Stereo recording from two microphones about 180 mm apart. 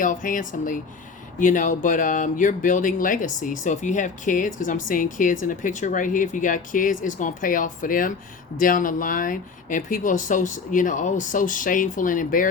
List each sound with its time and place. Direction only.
0.0 s speech: 45° left (ahead or behind)